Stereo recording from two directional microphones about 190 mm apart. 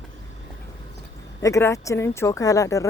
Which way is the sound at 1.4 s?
15° left (ahead or behind).